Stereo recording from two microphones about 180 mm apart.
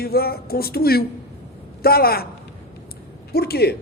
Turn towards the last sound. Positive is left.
turn(degrees=60)  # may be behind; listen again after turning